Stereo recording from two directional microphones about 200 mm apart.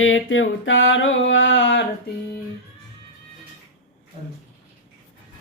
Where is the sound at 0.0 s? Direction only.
75° left (ahead or behind).